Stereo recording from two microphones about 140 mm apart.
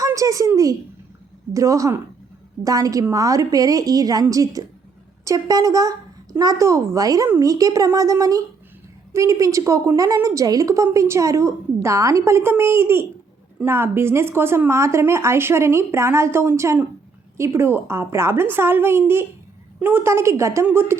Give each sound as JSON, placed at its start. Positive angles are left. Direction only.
{"t": 0.0, "sound": "a child's voice", "side_deg": -25}